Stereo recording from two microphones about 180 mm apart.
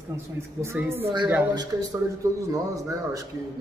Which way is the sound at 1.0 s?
25° right (ahead or behind).